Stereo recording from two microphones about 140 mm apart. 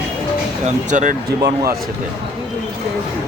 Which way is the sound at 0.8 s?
65° right (ahead or behind).